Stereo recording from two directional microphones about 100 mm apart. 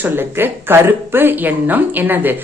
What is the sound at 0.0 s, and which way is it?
Speech, 20° right (ahead or behind).